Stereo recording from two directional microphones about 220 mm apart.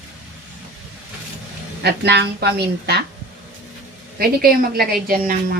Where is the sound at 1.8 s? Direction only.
50° right (ahead or behind).